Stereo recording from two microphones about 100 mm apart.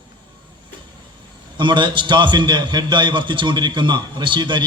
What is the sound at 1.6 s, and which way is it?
A man's voice, 50° right (ahead or behind).